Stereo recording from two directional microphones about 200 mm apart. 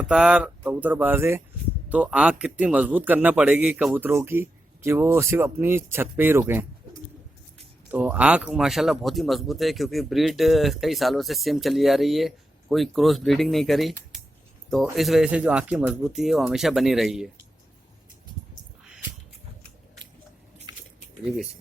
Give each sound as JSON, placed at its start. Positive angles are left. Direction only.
{"t": 0.0, "sound": "a man's voice", "side_deg": -5}
{"t": 7.9, "sound": "speech", "side_deg": -5}
{"t": 20.7, "sound": "biting", "side_deg": -20}